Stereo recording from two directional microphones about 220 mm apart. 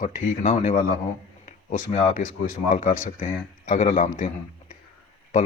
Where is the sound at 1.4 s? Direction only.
35° left (ahead or behind).